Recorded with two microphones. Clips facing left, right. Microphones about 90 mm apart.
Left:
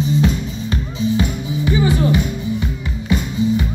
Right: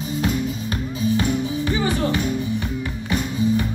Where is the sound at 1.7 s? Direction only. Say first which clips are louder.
Left 7 dB; 15° left (ahead or behind).